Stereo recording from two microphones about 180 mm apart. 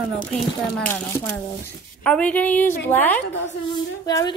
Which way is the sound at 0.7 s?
10° left (ahead or behind).